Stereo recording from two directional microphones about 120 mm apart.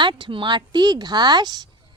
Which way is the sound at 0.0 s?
40° right (ahead or behind).